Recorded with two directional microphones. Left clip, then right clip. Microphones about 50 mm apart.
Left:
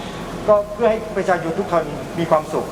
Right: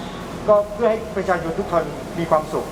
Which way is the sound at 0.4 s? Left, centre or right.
Left.